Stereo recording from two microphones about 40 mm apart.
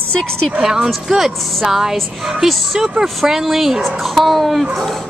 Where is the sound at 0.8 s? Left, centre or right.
Centre.